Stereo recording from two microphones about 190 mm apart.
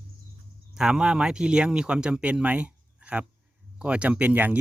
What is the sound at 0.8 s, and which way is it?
Speech, 5° right (ahead or behind).